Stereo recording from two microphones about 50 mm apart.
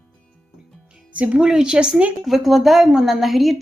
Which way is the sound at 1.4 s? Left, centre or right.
Centre.